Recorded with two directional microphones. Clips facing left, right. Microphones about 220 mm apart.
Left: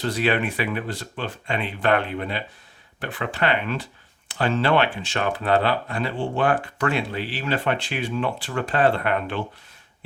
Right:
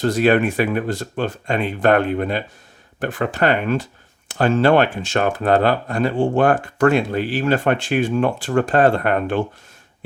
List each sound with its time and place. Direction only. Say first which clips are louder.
0.0 s speech: right 7 dB; 45° right (ahead or behind)